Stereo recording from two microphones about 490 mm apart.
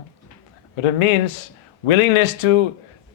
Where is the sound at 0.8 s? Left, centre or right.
Left.